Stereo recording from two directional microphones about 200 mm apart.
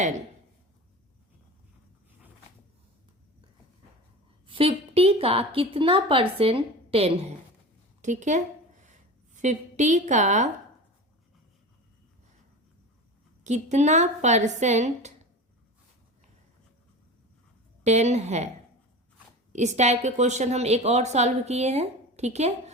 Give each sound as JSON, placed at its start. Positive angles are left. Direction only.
{"t": 4.4, "sound": "a woman's voice", "side_deg": -25}
{"t": 8.8, "sound": "a sound", "side_deg": -35}
{"t": 13.4, "sound": "a woman's voice", "side_deg": -35}
{"t": 17.8, "sound": "a woman's voice", "side_deg": -35}
{"t": 19.5, "sound": "a woman's voice", "side_deg": -35}